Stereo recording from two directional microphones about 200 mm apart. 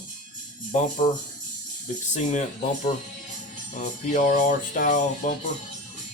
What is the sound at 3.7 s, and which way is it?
Music, 40° left (ahead or behind).